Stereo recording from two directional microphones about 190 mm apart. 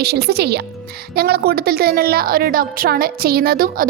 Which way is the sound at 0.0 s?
55° right (ahead or behind).